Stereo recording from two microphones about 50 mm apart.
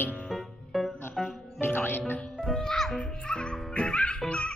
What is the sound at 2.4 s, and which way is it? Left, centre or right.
Speech, centre.